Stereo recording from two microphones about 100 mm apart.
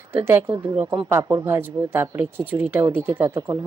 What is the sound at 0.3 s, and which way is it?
Speech, 25° right (ahead or behind).